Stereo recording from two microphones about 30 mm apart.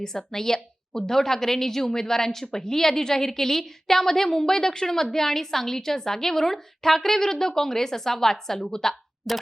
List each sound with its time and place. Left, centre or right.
0.0 s a woman's voice: centre
9.3 s speech: centre